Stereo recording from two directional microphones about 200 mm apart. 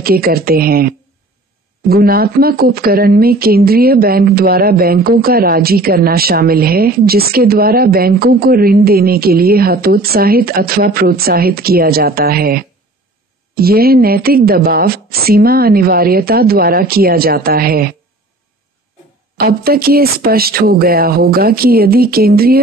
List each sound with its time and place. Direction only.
0.0 s a woman's voice: 50° right (ahead or behind)
19.3 s a woman's voice: 50° right (ahead or behind)